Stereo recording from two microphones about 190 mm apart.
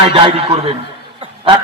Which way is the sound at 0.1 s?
30° right (ahead or behind).